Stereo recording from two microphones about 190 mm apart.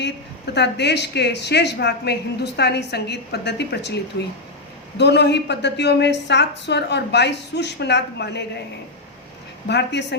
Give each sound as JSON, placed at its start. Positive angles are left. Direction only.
{"t": 0.0, "sound": "a woman's voice", "side_deg": 65}
{"t": 9.6, "sound": "a woman's voice", "side_deg": 65}